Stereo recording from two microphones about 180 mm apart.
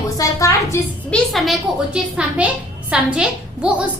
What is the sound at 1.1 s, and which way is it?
A woman's voice, centre (ahead or behind).